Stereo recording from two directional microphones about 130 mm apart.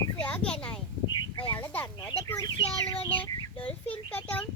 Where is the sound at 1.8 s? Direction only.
25° left (ahead or behind).